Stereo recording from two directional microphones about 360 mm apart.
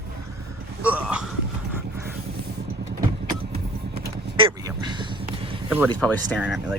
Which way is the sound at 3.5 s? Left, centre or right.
Right.